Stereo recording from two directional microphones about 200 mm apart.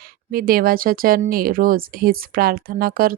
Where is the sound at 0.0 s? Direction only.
50° right (ahead or behind).